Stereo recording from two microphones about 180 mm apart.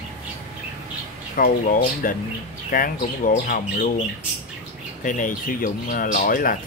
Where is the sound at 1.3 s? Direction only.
50° left (ahead or behind).